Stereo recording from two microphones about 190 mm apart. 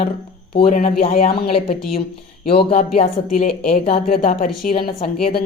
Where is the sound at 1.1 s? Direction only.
50° left (ahead or behind).